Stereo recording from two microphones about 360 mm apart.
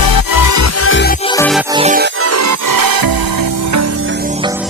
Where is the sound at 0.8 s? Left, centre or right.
Left.